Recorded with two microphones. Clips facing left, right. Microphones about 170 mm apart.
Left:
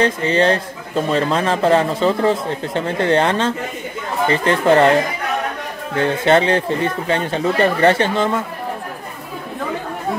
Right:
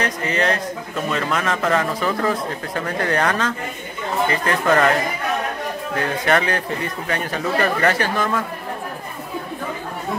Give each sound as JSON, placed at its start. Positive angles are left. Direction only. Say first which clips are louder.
{"t": 0.0, "sound": "a man's voice", "louder": "left 6 dB", "side_deg": 30}
{"t": 5.9, "sound": "a man's voice", "louder": "left 6 dB", "side_deg": 25}